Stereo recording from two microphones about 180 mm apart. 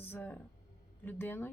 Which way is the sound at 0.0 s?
10° left (ahead or behind).